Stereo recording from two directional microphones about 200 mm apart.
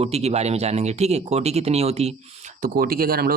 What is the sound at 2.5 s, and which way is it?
Speech, 45° right (ahead or behind).